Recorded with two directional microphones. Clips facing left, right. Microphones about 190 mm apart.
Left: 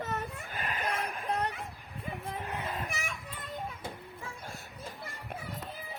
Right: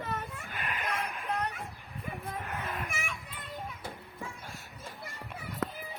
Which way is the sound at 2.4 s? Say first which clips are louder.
Left 2 dB; 20° left (ahead or behind).